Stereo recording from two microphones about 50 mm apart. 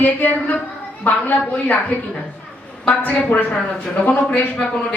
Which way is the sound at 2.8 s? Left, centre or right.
Left.